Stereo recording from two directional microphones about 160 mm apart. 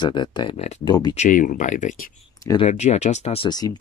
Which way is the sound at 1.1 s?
50° left (ahead or behind).